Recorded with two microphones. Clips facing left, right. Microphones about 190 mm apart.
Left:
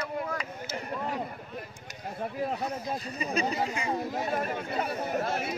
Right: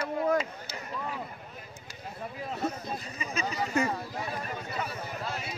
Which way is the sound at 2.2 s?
50° left (ahead or behind).